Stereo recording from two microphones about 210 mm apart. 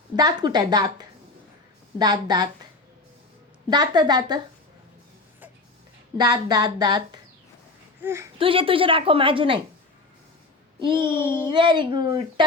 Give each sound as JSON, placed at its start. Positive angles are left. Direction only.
{"t": 0.2, "sound": "a woman's voice", "side_deg": -20}
{"t": 3.7, "sound": "a woman's voice", "side_deg": -20}
{"t": 6.1, "sound": "a woman's voice", "side_deg": -20}
{"t": 8.4, "sound": "a woman's voice", "side_deg": -25}
{"t": 11.1, "sound": "a child's voice", "side_deg": 10}
{"t": 11.4, "sound": "a woman's voice", "side_deg": -20}